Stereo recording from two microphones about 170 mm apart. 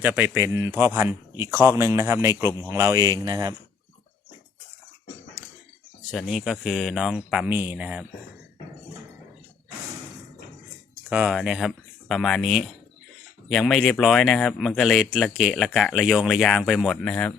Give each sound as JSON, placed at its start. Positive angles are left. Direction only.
{"t": 0.0, "sound": "a man's voice", "side_deg": -10}
{"t": 6.1, "sound": "speech", "side_deg": 0}
{"t": 11.1, "sound": "speech", "side_deg": -5}